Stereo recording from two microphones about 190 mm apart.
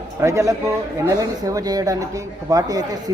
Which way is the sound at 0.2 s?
15° right (ahead or behind).